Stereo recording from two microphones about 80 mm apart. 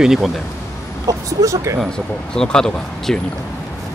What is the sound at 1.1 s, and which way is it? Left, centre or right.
Speech, right.